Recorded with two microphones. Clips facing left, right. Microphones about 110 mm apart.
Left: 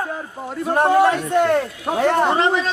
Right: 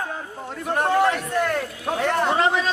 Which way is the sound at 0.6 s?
25° left (ahead or behind).